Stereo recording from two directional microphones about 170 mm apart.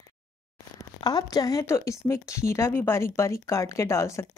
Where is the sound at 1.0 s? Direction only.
25° left (ahead or behind).